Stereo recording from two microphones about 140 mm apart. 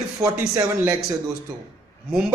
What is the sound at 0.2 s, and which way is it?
Speech, 20° right (ahead or behind).